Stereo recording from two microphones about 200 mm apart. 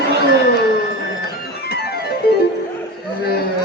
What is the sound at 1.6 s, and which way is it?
Organ, 50° left (ahead or behind).